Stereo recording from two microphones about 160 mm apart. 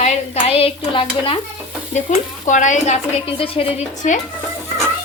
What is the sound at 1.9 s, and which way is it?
Speech, 50° left (ahead or behind).